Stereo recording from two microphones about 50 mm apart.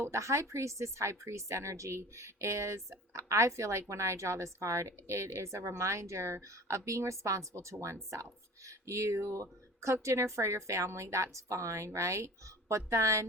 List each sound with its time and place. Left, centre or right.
0.0 s speech: right
11.9 s speech: right